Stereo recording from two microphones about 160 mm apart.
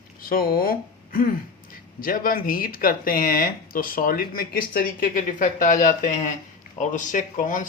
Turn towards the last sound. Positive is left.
turn(degrees=55)  # may be behind; listen again after turning